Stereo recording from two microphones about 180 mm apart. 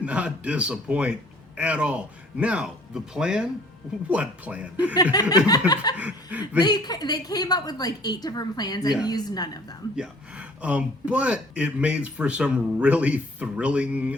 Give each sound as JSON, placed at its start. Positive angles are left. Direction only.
{"t": 0.0, "sound": "speech", "side_deg": -5}
{"t": 5.5, "sound": "a woman's voice", "side_deg": 20}
{"t": 6.0, "sound": "chuckle", "side_deg": -10}
{"t": 6.6, "sound": "a woman's voice", "side_deg": 25}
{"t": 9.9, "sound": "speech", "side_deg": -5}